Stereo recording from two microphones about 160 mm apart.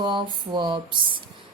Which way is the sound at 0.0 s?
30° right (ahead or behind).